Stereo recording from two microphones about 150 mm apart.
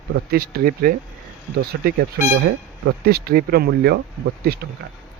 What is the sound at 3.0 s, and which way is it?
Speech, 90° right.